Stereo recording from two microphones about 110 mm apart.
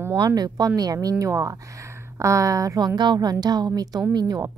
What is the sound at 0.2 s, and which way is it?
Speech, 35° right (ahead or behind).